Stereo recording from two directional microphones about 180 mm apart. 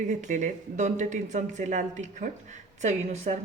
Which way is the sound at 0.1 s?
45° right (ahead or behind).